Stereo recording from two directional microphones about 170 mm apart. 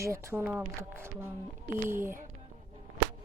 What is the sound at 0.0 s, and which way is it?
Speech, 15° right (ahead or behind).